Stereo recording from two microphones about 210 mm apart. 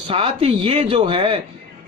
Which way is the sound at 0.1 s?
25° right (ahead or behind).